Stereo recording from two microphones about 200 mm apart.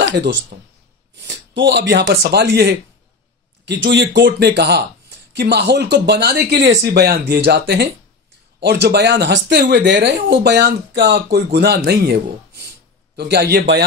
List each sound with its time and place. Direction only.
0.0 s speech: 60° right (ahead or behind)